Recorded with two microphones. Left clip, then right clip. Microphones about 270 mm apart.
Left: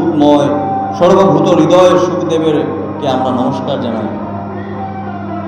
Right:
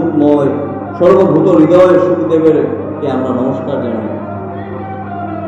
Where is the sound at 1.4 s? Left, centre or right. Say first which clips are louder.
Right 1 dB; left.